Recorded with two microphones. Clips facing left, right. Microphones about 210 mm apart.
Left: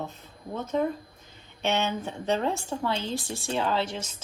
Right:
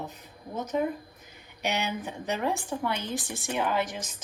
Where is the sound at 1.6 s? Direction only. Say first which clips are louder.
Left 3 dB; 15° right (ahead or behind).